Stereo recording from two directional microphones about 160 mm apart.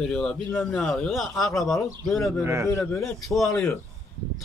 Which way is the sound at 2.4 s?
20° right (ahead or behind).